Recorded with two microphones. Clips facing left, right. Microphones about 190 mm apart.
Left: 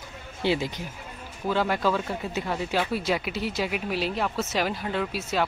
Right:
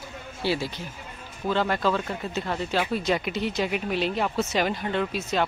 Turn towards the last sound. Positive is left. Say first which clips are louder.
# right 1 dB
turn(degrees=5)  # may be behind; listen again after turning